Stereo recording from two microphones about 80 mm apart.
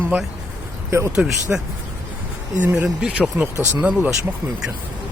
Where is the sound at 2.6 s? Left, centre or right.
Centre.